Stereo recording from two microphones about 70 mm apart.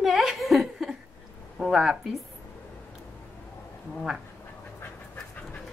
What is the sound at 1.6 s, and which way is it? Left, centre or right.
Speech, centre.